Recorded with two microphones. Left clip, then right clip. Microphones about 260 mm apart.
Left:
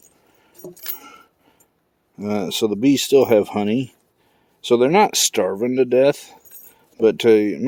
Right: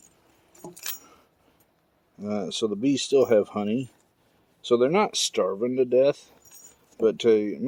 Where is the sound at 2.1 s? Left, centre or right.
Left.